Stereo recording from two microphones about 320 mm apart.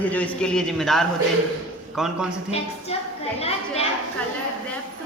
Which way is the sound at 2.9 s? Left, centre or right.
Centre.